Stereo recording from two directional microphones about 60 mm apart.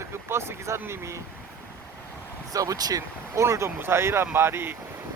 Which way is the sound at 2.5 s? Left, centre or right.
Right.